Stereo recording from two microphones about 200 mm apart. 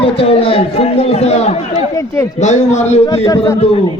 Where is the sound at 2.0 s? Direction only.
15° left (ahead or behind).